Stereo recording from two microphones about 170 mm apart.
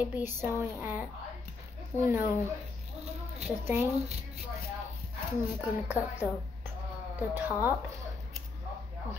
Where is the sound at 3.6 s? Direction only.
15° right (ahead or behind).